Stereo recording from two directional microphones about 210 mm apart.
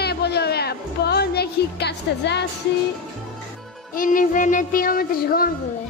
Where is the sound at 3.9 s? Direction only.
40° left (ahead or behind).